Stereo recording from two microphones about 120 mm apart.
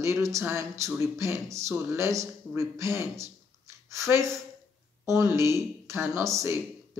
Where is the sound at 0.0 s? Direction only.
25° right (ahead or behind).